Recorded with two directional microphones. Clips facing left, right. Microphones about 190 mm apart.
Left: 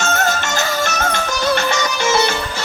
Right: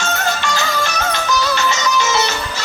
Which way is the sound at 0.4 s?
50° left (ahead or behind).